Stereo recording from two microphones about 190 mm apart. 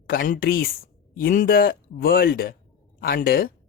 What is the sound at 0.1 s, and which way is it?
Speech, 50° left (ahead or behind).